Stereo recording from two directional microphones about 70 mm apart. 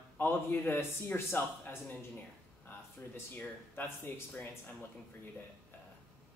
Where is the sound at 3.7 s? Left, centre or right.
Left.